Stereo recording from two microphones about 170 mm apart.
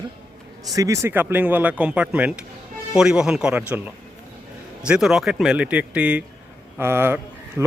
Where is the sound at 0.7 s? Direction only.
20° right (ahead or behind).